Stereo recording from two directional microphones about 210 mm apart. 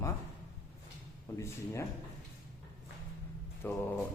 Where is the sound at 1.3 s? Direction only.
10° left (ahead or behind).